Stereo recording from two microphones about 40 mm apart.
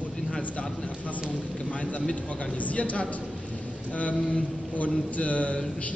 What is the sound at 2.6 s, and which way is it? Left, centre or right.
A man's voice, left.